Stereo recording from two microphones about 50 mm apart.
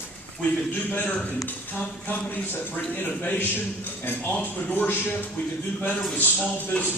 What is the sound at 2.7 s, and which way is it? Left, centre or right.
Speech, left.